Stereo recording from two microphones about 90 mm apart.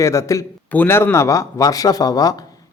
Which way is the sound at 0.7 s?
25° left (ahead or behind).